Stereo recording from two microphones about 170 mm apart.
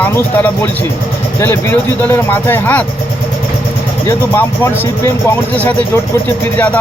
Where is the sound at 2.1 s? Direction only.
10° left (ahead or behind).